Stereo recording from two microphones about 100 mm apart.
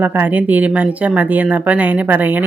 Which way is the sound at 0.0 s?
20° right (ahead or behind).